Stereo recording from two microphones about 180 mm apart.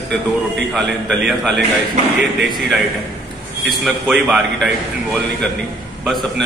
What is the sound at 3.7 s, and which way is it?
A man's voice, centre (ahead or behind).